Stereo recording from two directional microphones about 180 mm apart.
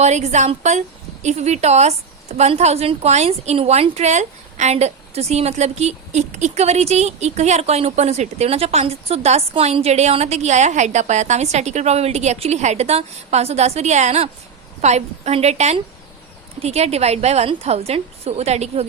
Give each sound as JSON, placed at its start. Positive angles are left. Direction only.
{"t": 0.0, "sound": "a woman's voice", "side_deg": -40}